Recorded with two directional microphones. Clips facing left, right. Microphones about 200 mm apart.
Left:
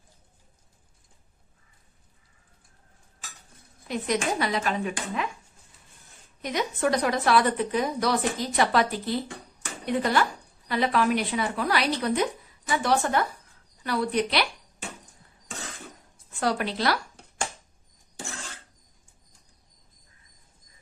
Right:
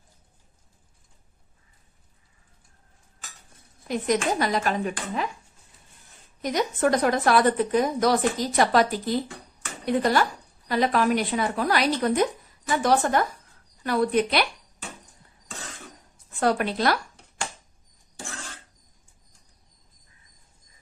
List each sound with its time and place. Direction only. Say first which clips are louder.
3.8 s a woman's voice: right 3 dB; 45° right (ahead or behind)
6.4 s a woman's voice: right 3 dB; 45° right (ahead or behind)
16.4 s a woman's voice: right 3 dB; 50° right (ahead or behind)